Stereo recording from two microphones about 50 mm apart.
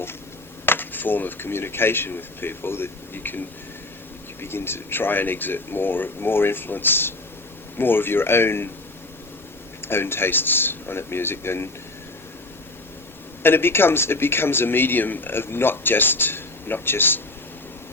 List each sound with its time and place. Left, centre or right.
0.6 s speech: left
9.8 s speech: left
13.4 s speech: left